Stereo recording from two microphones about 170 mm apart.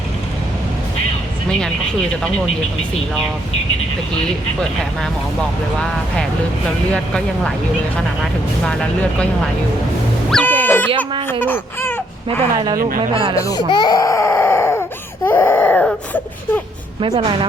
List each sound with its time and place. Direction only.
6.9 s speech: 5° left (ahead or behind)
10.3 s music: 10° left (ahead or behind)
10.9 s speech: 30° right (ahead or behind)
11.3 s speech: 10° left (ahead or behind)
13.0 s speech: 30° right (ahead or behind)
13.7 s a sound: 25° left (ahead or behind)
17.0 s speech: 30° right (ahead or behind)